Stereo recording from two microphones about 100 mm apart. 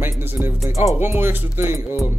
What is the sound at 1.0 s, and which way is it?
Speech, 20° right (ahead or behind).